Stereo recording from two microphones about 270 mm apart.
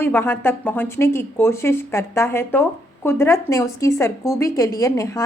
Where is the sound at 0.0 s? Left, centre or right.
Centre.